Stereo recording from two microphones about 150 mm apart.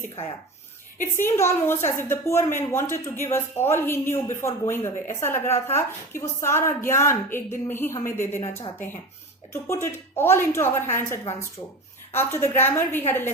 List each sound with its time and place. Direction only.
1.2 s a woman's voice: 15° left (ahead or behind)
12.1 s a woman's voice: 15° left (ahead or behind)